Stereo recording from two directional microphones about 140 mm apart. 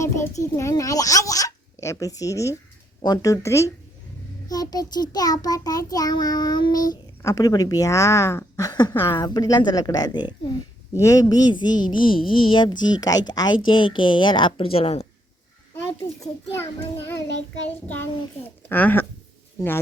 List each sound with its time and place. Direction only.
0.0 s a child's voice: 20° left (ahead or behind); by 15.0 s 45° left (ahead or behind)
16.2 s a child's voice: 15° left (ahead or behind)
18.7 s a child's voice: 15° left (ahead or behind)